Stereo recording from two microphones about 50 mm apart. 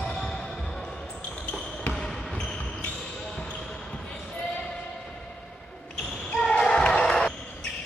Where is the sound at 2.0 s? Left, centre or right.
Centre.